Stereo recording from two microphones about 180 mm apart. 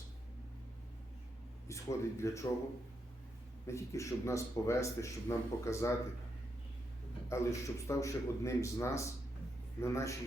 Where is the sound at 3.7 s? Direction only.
15° left (ahead or behind).